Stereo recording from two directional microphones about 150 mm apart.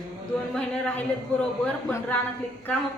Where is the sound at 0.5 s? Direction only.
5° left (ahead or behind).